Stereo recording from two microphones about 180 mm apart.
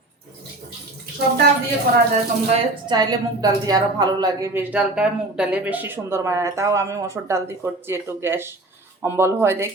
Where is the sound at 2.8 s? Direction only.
20° right (ahead or behind).